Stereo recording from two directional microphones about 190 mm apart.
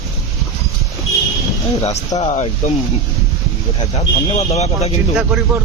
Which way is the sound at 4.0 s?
35° left (ahead or behind).